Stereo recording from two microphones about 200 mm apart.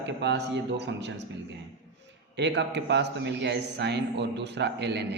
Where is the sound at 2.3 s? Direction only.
60° right (ahead or behind).